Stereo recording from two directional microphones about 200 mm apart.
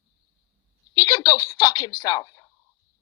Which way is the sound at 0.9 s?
20° left (ahead or behind).